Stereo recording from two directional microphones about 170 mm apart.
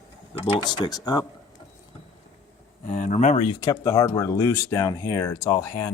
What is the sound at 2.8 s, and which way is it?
Speech, 45° left (ahead or behind).